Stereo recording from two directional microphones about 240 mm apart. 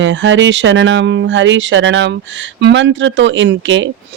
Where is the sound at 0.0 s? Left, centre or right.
Right.